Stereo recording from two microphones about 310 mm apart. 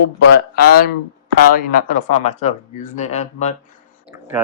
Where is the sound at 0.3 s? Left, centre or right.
Left.